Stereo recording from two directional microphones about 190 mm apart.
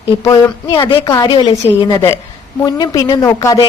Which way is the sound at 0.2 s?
20° left (ahead or behind).